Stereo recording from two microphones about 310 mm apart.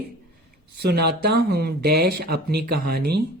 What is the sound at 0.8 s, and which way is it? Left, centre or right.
Speech, right.